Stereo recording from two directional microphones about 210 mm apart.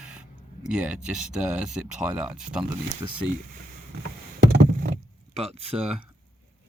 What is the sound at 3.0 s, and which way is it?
Speech, 15° right (ahead or behind).